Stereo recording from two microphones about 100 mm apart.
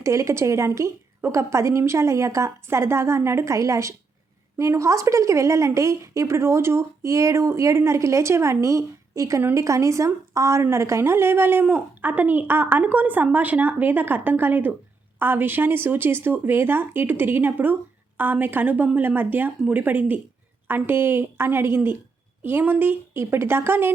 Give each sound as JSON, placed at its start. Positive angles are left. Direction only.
{"t": 0.0, "sound": "a woman's voice", "side_deg": -30}
{"t": 9.4, "sound": "a woman's voice", "side_deg": -20}
{"t": 9.6, "sound": "a woman's voice", "side_deg": -30}